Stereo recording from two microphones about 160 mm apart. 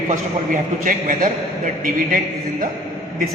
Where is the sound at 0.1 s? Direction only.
55° right (ahead or behind).